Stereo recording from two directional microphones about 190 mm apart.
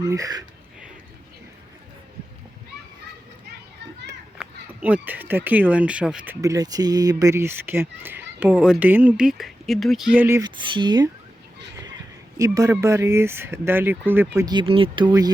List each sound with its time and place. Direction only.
0.0 s speech: 20° right (ahead or behind)
4.4 s speech: 5° right (ahead or behind)
6.4 s speech: 20° right (ahead or behind)
12.4 s speech: 15° right (ahead or behind)